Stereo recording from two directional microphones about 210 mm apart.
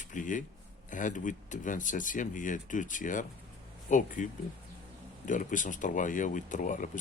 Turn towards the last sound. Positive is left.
turn(degrees=35)  # may be behind; listen again after turning